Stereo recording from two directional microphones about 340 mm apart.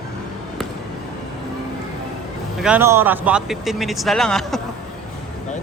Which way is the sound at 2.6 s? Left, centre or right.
Centre.